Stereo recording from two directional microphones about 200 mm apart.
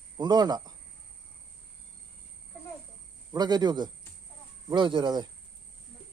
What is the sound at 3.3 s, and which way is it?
Speech, 20° right (ahead or behind).